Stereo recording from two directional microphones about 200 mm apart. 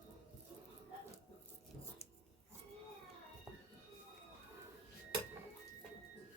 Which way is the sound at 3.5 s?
10° right (ahead or behind).